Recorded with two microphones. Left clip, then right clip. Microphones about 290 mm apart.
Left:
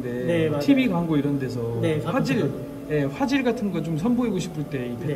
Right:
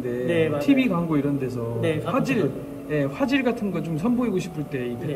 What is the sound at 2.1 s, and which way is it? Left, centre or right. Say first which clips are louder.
A man's voice: right 1 dB; centre.